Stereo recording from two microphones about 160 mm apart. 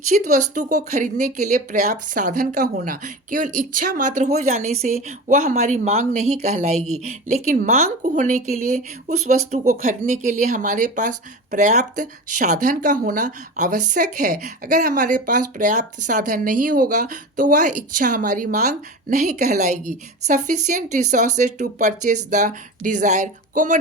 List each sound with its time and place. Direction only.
0.3 s speech: 50° right (ahead or behind)
9.6 s speech: 60° right (ahead or behind)